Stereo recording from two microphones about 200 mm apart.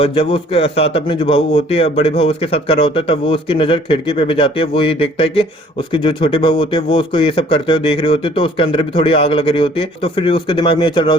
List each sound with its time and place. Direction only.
0.0 s a man's voice: 30° left (ahead or behind)